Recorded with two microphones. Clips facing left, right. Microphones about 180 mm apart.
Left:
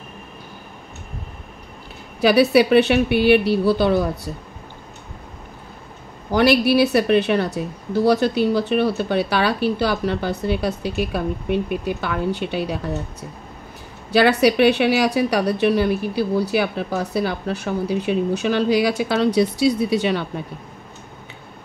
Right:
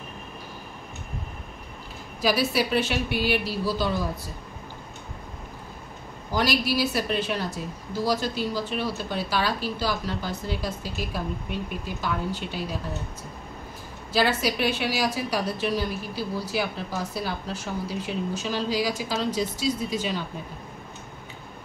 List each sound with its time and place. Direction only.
2.2 s a woman's voice: 65° left (ahead or behind)
6.3 s a woman's voice: 65° left (ahead or behind)
14.1 s a woman's voice: 65° left (ahead or behind)